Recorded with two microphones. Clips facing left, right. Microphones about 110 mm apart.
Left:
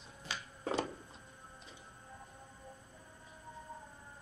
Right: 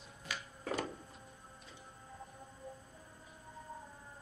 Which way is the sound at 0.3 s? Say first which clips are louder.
Left 2 dB; 25° left (ahead or behind).